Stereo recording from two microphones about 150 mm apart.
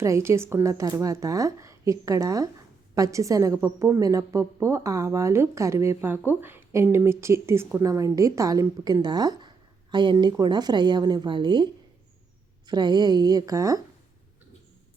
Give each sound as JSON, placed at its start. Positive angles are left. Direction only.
{"t": 0.0, "sound": "a woman's voice", "side_deg": -20}